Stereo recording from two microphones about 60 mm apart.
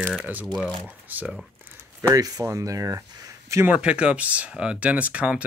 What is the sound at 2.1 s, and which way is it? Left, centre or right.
Speech, right.